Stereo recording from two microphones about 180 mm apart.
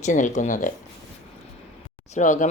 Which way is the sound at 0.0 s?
45° left (ahead or behind).